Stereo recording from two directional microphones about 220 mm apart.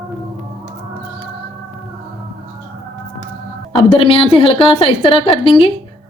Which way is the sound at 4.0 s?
25° left (ahead or behind).